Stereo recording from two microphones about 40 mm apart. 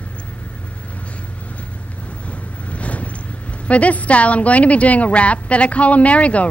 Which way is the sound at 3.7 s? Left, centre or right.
Left.